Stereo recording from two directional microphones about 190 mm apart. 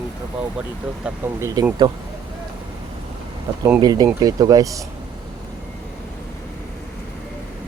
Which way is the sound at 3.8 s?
20° right (ahead or behind).